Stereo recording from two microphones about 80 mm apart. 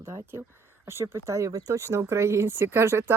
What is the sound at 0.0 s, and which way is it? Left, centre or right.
Speech, right.